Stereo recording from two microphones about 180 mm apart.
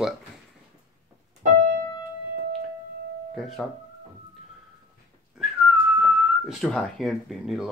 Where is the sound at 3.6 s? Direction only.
5° left (ahead or behind).